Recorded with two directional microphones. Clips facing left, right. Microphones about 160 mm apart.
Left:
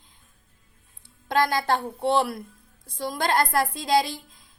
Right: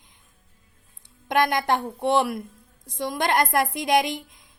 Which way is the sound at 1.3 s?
20° right (ahead or behind).